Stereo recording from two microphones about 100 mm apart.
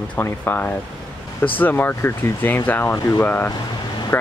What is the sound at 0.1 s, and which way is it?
Speech, 20° left (ahead or behind).